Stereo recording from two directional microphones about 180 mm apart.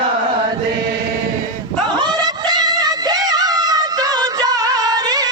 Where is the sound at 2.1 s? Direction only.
25° right (ahead or behind).